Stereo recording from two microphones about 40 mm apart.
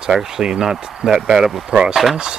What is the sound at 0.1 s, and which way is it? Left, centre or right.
Speech, centre.